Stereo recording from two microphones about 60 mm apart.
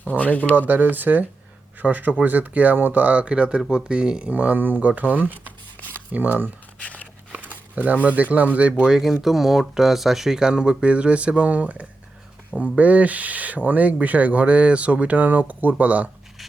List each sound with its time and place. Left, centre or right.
0.0 s speech: left
0.7 s speech: right
6.7 s a sound: left
7.5 s speech: right
8.8 s speech: centre
12.5 s speech: left
12.7 s speech: right